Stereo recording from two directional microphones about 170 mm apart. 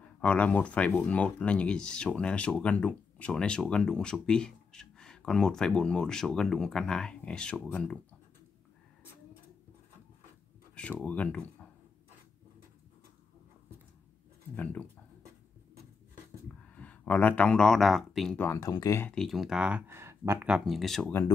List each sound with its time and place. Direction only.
0.2 s speech: 10° left (ahead or behind)
10.7 s speech: 5° left (ahead or behind)
14.5 s speech: 10° left (ahead or behind)
16.6 s speech: 10° left (ahead or behind)
18.4 s speech: 15° left (ahead or behind)
19.1 s speech: centre (ahead or behind)